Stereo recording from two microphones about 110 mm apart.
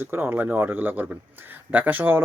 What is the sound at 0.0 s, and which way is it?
Speech, 20° right (ahead or behind).